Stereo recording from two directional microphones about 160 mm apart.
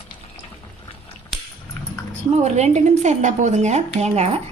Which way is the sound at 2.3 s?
45° right (ahead or behind).